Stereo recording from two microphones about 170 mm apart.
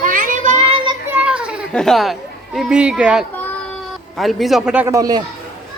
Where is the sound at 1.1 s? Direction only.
5° right (ahead or behind).